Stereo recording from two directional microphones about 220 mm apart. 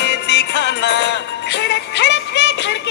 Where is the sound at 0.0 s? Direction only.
50° left (ahead or behind).